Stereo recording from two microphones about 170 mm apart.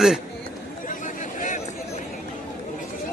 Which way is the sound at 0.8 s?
50° left (ahead or behind).